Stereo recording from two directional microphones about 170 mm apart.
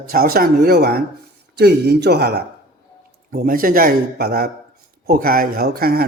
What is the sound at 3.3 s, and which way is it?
Speech, 55° right (ahead or behind).